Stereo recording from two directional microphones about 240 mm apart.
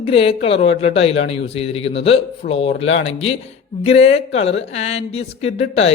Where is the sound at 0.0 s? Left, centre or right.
Left.